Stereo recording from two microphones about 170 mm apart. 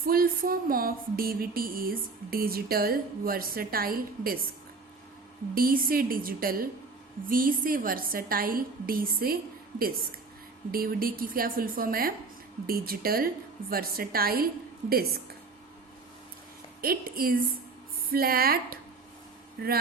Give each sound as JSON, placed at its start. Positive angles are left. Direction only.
{"t": 0.0, "sound": "music", "side_deg": -60}
{"t": 5.5, "sound": "music", "side_deg": -60}
{"t": 16.8, "sound": "music", "side_deg": -60}